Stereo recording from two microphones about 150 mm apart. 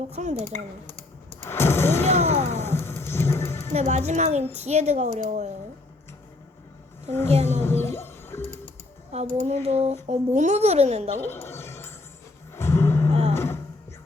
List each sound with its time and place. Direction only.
0.1 s a woman's voice: 50° right (ahead or behind)
1.4 s a sound: 15° left (ahead or behind)
2.1 s a sound: 45° right (ahead or behind)
2.6 s a sound: 15° left (ahead or behind)
3.7 s a woman's voice: 50° right (ahead or behind)
7.1 s speech: 15° left (ahead or behind)
7.6 s music: 15° left (ahead or behind)
9.1 s a woman's voice: 50° right (ahead or behind)
11.2 s a sound: 15° left (ahead or behind)
12.5 s music: 15° left (ahead or behind)
13.1 s music: 45° right (ahead or behind)
13.3 s music: 15° left (ahead or behind)